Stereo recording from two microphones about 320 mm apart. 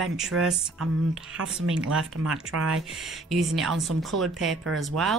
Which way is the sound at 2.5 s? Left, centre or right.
Right.